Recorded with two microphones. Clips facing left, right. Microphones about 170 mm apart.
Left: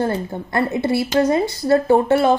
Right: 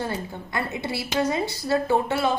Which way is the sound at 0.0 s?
50° left (ahead or behind).